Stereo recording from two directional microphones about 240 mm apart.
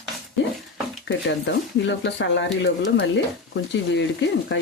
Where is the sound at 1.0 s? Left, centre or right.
Left.